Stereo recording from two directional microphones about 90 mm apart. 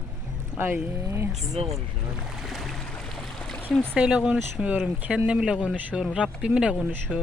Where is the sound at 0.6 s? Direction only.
25° right (ahead or behind).